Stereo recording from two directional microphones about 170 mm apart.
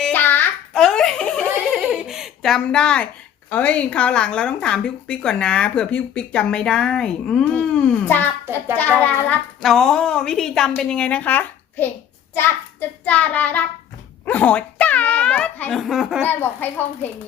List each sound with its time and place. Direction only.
0.0 s giggle: 10° left (ahead or behind)
3.5 s speech: 10° left (ahead or behind)
13.1 s speech: 10° left (ahead or behind)
16.2 s speech: 10° left (ahead or behind)